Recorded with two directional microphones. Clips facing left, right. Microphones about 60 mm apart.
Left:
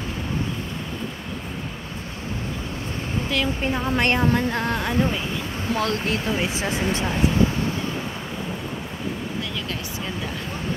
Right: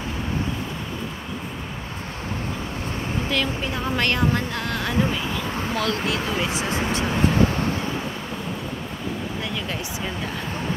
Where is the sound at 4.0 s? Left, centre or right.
Left.